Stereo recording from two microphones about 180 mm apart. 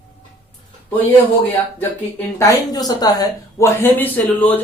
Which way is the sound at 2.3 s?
20° left (ahead or behind).